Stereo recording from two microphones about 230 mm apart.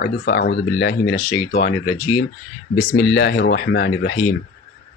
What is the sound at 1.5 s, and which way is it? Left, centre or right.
Speech, left.